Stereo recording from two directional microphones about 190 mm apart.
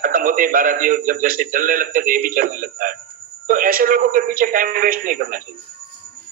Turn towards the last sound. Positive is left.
turn(degrees=-45)  # may be behind; listen again after turning